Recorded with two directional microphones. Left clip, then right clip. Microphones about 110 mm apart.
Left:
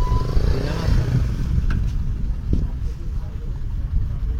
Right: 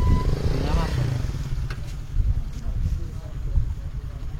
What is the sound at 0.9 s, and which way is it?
Vehicle, 50° left (ahead or behind).